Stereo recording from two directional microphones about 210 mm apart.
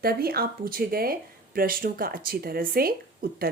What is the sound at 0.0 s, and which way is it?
Speech, 45° right (ahead or behind).